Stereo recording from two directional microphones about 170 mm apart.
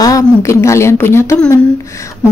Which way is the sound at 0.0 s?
20° left (ahead or behind).